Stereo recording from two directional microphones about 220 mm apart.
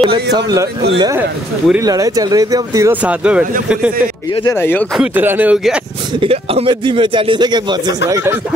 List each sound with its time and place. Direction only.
0.0 s speech: 25° right (ahead or behind); by 4.1 s 5° right (ahead or behind)
4.4 s speech: 15° left (ahead or behind)
4.9 s speech: 5° right (ahead or behind)
6.1 s speech: 25° right (ahead or behind)